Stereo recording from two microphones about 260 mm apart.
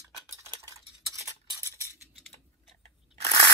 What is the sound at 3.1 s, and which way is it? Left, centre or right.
Crunch, right.